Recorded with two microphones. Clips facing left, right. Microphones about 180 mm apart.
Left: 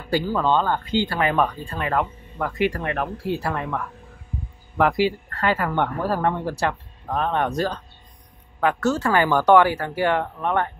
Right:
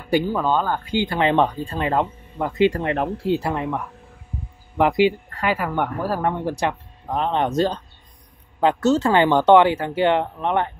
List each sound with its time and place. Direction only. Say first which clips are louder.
0.1 s speech: right 1 dB; 20° right (ahead or behind)